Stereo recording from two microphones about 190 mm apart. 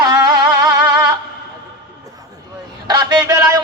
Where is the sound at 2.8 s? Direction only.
20° right (ahead or behind).